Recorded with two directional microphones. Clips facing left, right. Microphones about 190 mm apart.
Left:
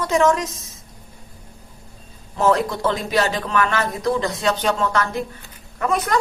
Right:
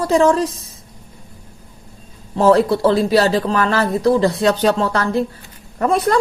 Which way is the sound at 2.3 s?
30° right (ahead or behind).